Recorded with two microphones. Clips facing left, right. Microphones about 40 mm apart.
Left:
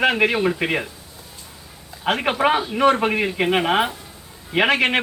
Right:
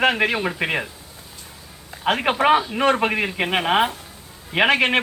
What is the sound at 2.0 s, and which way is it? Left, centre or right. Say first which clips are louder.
Speech: right 1 dB; centre.